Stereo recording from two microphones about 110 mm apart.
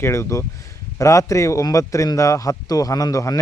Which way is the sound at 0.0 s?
25° left (ahead or behind).